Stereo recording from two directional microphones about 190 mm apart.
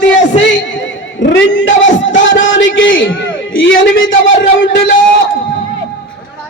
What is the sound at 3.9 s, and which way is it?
Speech, 85° left.